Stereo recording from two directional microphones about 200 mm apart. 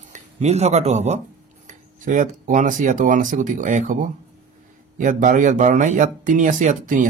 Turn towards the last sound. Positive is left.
turn(degrees=-40)  # may be behind; listen again after turning